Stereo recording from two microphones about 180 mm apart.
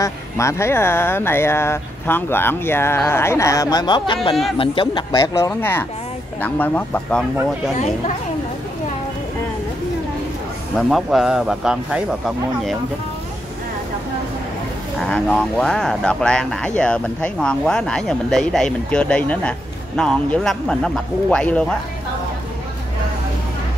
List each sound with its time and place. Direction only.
0.0 s speech: 15° left (ahead or behind)
7.7 s speech: 40° left (ahead or behind)
10.9 s speech: centre (ahead or behind)
15.0 s speech: 5° left (ahead or behind)